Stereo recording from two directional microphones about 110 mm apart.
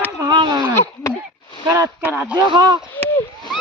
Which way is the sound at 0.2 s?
40° right (ahead or behind).